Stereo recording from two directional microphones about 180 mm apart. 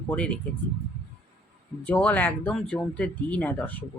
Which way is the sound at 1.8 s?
10° left (ahead or behind).